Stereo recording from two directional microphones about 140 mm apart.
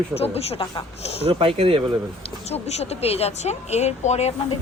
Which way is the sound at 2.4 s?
50° left (ahead or behind).